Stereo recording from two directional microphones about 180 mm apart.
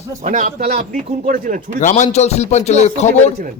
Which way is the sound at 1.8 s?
45° left (ahead or behind).